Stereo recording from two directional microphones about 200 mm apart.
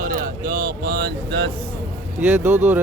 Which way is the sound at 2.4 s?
35° right (ahead or behind).